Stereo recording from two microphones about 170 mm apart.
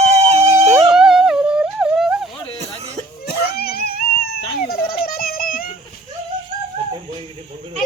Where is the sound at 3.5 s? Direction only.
65° left (ahead or behind).